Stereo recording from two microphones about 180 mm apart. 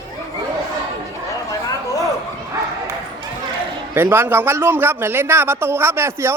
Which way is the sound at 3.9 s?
10° right (ahead or behind).